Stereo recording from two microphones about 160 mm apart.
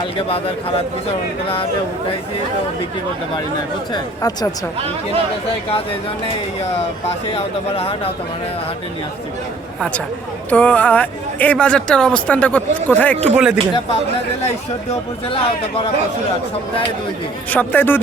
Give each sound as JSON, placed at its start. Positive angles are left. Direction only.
{"t": 0.0, "sound": "speech", "side_deg": 35}
{"t": 3.9, "sound": "speech", "side_deg": 25}
{"t": 7.3, "sound": "speech", "side_deg": 40}
{"t": 10.5, "sound": "speech", "side_deg": 10}
{"t": 13.3, "sound": "speech", "side_deg": -5}
{"t": 15.3, "sound": "speech", "side_deg": 35}
{"t": 17.5, "sound": "speech", "side_deg": 10}